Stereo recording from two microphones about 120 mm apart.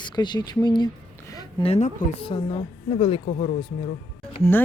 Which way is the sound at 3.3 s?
85° left.